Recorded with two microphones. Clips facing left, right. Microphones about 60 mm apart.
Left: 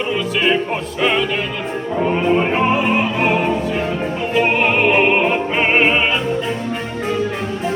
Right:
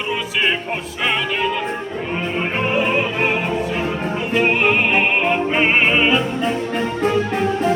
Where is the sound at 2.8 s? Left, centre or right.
Centre.